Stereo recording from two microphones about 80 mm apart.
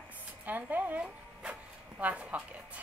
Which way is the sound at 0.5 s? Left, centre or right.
Right.